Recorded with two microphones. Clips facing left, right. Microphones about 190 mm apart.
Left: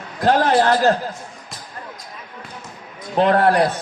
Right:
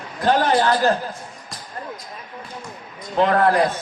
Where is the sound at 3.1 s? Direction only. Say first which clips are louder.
Left 2 dB; 70° left (ahead or behind).